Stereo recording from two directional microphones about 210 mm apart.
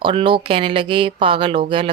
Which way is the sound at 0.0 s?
25° right (ahead or behind).